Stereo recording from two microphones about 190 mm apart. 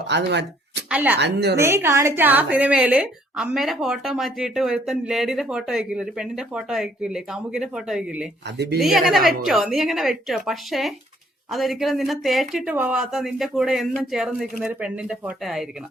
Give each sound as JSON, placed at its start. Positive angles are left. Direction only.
{"t": 0.1, "sound": "speech", "side_deg": -65}
{"t": 0.9, "sound": "speech", "side_deg": -10}
{"t": 1.2, "sound": "a woman's voice", "side_deg": -65}
{"t": 1.5, "sound": "a woman's voice", "side_deg": -15}
{"t": 8.5, "sound": "a woman's voice", "side_deg": -60}
{"t": 8.8, "sound": "a woman's voice", "side_deg": 0}